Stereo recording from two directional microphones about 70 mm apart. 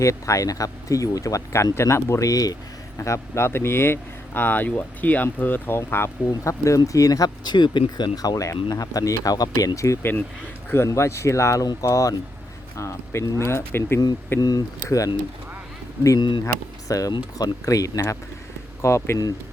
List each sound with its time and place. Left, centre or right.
0.0 s speech: left
1.7 s speech: left
3.0 s speech: left
6.2 s speech: left
10.0 s speech: left
10.8 s speech: left
12.7 s speech: left
14.3 s speech: left
14.8 s speech: left
16.9 s speech: left